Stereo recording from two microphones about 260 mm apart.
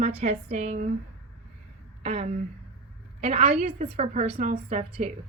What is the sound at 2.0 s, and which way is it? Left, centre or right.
A woman's voice, right.